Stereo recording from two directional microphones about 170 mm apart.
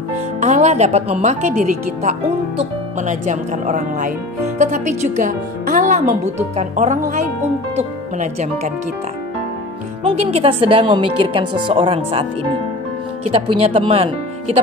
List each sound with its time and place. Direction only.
0.4 s a woman's voice: 40° right (ahead or behind)
10.0 s a woman's voice: 35° right (ahead or behind)